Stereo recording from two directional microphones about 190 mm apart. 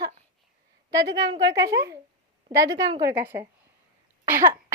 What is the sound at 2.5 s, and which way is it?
Speech, 15° right (ahead or behind).